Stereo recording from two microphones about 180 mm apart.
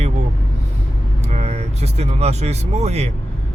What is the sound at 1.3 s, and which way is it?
Speech, 40° right (ahead or behind).